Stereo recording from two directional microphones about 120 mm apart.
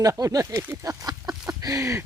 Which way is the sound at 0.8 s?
30° right (ahead or behind).